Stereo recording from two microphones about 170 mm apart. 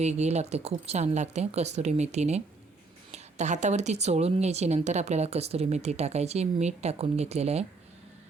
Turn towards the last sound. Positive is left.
turn(degrees=-40)  # may be behind; listen again after turning